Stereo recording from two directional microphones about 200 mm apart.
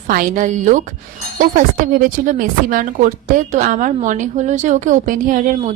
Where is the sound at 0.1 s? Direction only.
40° right (ahead or behind).